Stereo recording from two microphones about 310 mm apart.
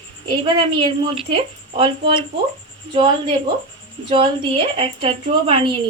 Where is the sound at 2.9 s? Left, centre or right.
Centre.